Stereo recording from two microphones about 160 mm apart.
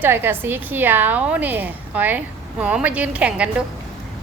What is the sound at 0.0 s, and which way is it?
A woman's voice, 15° right (ahead or behind).